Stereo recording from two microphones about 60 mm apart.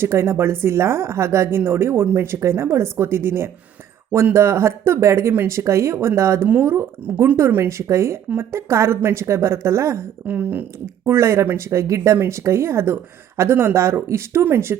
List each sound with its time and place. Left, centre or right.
0.0 s speech: right
10.2 s speech: right
11.0 s speech: right